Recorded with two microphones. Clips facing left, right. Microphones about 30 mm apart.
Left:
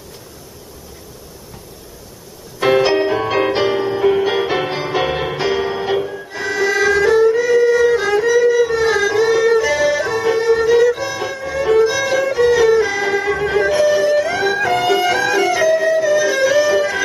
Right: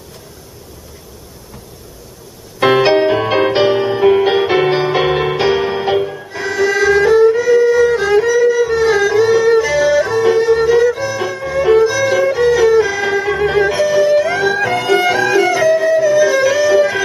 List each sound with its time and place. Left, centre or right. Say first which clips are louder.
2.6 s music: right 3 dB; right
5.9 s music: right 3 dB; centre
6.2 s violin: right 2 dB; centre
8.3 s music: right 1 dB; centre
11.3 s violin: right 3 dB; centre
11.8 s music: right 3 dB; centre
13.8 s music: right 2 dB; centre